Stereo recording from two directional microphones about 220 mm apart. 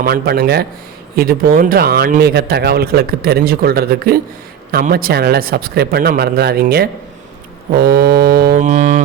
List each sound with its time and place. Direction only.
0.0 s speech: 45° right (ahead or behind)